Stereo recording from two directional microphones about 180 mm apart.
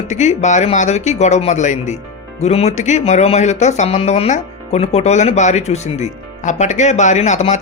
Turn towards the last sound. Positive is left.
turn(degrees=40)  # may be behind; listen again after turning